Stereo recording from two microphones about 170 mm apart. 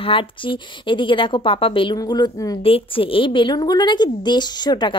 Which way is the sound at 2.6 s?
35° left (ahead or behind).